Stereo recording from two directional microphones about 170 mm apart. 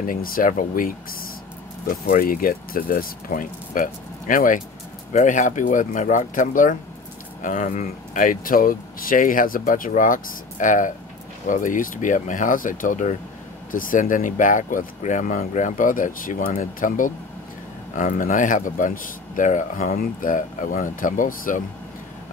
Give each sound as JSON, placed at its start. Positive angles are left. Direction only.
{"t": 0.0, "sound": "speech", "side_deg": 55}
{"t": 2.0, "sound": "speech", "side_deg": 55}